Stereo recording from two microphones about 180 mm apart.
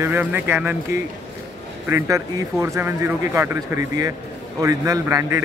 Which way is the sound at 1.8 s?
15° right (ahead or behind).